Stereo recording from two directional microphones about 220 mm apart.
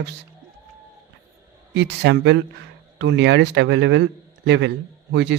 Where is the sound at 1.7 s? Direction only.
50° right (ahead or behind).